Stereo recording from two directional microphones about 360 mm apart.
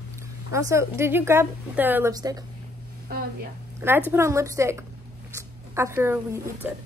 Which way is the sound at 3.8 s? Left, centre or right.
Centre.